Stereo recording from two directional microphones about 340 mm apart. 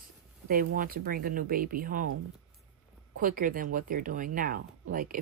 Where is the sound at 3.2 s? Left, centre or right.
Right.